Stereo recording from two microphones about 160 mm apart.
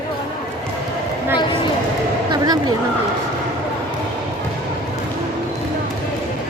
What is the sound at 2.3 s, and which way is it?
Speech, 25° right (ahead or behind).